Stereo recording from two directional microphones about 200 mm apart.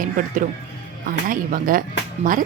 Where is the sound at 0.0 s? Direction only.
40° right (ahead or behind).